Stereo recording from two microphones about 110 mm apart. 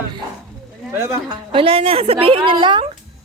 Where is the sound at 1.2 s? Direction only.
50° right (ahead or behind).